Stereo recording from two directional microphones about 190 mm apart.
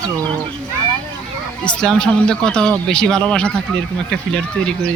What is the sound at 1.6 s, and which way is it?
Speech, 5° left (ahead or behind).